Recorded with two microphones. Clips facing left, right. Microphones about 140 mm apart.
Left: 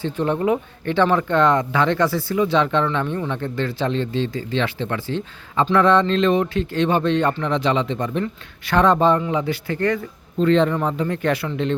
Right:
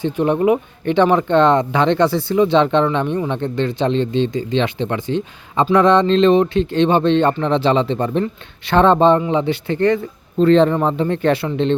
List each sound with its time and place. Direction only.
0.0 s speech: 15° right (ahead or behind)